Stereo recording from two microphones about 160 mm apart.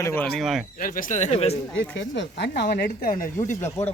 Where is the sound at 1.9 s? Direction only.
90° left; by 3.5 s 60° left (ahead or behind).